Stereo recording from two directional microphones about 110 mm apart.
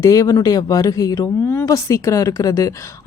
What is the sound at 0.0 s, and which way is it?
A woman's voice, 30° left (ahead or behind).